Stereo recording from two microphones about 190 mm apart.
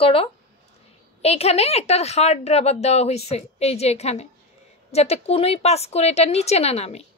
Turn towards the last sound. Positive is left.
turn(degrees=35)  # may be behind; listen again after turning